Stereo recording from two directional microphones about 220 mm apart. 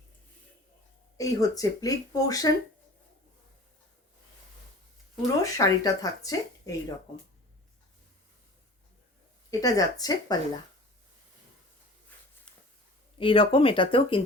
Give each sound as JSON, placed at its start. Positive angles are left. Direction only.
{"t": 1.1, "sound": "speech", "side_deg": 15}
{"t": 5.4, "sound": "speech", "side_deg": 15}
{"t": 9.5, "sound": "speech", "side_deg": 15}
{"t": 12.1, "sound": "a sound", "side_deg": 5}
{"t": 13.1, "sound": "speech", "side_deg": 25}